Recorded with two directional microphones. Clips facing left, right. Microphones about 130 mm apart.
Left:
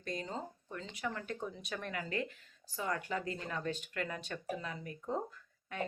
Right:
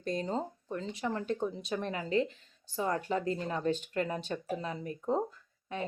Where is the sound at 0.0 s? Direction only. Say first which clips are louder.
Right 7 dB; 35° right (ahead or behind).